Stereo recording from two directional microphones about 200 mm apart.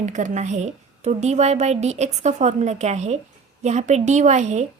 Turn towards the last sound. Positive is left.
turn(degrees=-35)  # may be behind; listen again after turning